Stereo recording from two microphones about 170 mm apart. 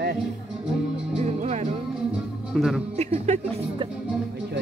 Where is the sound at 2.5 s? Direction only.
Centre (ahead or behind).